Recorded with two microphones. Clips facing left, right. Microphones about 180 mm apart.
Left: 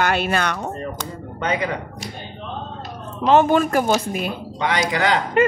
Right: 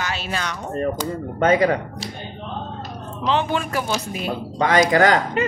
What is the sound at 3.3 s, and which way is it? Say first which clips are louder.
A woman's voice: left 7 dB; 45° left (ahead or behind).